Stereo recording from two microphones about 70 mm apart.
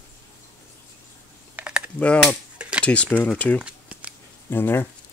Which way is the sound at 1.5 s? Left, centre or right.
Right.